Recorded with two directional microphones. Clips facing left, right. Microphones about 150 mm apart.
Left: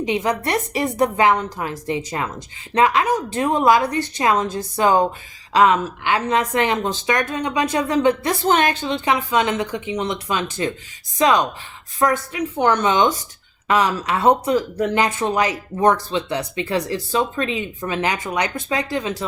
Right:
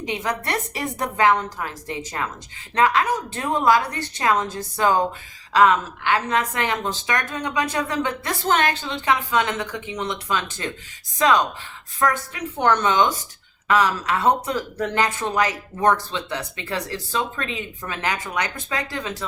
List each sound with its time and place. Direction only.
0.0 s speech: 20° left (ahead or behind)